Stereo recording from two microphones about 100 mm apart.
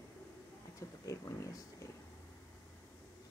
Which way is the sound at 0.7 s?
30° left (ahead or behind).